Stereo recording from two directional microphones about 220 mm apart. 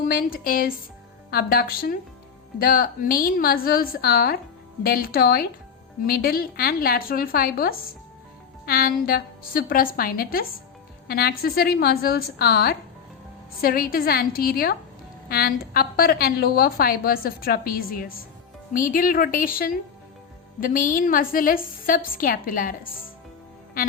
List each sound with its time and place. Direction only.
0.0 s a woman's voice: 40° left (ahead or behind)